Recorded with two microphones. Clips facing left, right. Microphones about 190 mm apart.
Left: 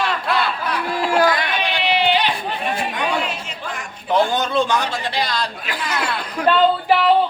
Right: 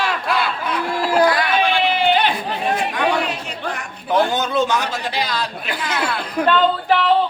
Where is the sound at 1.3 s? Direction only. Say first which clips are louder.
Right 5 dB; 20° left (ahead or behind).